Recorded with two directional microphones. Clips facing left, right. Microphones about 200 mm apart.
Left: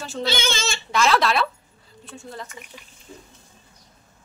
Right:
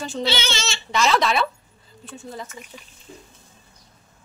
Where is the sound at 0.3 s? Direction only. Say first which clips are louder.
Left 4 dB; 50° left (ahead or behind).